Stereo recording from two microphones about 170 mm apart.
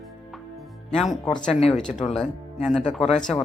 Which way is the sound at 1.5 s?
35° left (ahead or behind).